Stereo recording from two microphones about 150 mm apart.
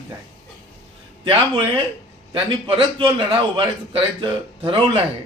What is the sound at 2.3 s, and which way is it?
A man's voice, 35° right (ahead or behind).